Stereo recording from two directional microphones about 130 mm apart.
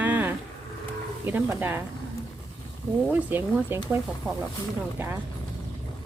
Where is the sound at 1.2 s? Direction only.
15° right (ahead or behind).